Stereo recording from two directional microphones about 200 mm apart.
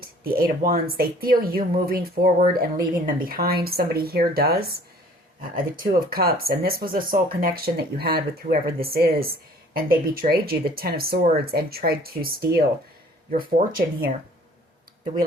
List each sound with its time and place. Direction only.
0.0 s speech: 45° right (ahead or behind)